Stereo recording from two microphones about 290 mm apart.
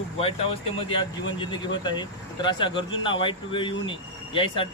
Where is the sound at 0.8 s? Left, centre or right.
Centre.